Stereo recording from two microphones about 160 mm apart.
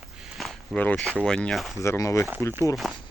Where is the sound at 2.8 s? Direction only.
Centre (ahead or behind).